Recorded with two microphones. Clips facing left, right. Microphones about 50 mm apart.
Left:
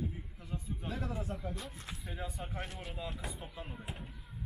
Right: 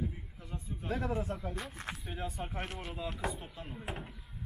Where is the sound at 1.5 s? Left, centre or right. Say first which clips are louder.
Right 4 dB; right.